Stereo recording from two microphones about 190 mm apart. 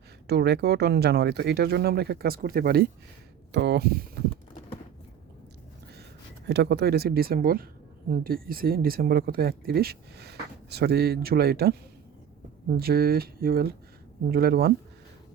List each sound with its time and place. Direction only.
0.3 s speech: 60° right (ahead or behind)
3.5 s speech: 65° right (ahead or behind)
6.5 s speech: 60° right (ahead or behind)
12.7 s speech: 55° right (ahead or behind)